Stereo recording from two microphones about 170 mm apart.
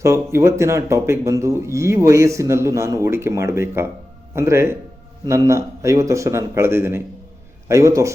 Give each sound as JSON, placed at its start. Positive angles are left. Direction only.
{"t": 0.0, "sound": "speech", "side_deg": -15}